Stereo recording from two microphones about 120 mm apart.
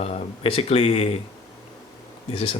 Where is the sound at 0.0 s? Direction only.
60° left (ahead or behind).